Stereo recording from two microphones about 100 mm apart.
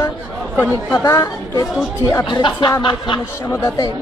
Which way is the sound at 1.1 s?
35° left (ahead or behind).